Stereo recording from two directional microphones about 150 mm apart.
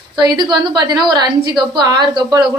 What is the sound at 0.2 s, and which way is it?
Speech, 30° right (ahead or behind).